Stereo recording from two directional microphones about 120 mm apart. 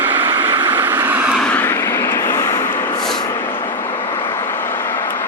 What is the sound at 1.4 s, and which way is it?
Vehicle, 10° left (ahead or behind).